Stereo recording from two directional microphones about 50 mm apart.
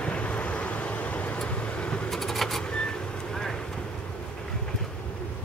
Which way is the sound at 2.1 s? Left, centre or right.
Centre.